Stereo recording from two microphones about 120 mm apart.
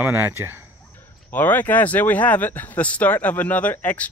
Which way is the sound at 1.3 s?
15° left (ahead or behind).